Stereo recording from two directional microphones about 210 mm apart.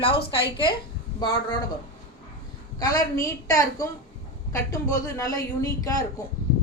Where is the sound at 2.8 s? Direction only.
15° left (ahead or behind).